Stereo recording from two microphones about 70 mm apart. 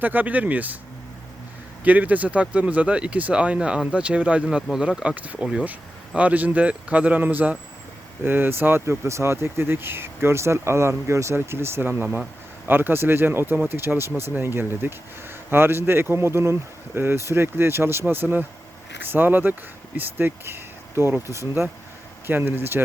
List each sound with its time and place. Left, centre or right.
0.0 s speech: right
1.8 s speech: right